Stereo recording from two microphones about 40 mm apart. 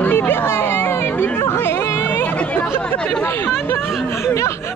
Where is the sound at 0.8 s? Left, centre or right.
Left.